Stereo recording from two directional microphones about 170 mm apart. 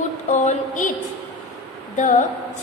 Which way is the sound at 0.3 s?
45° left (ahead or behind).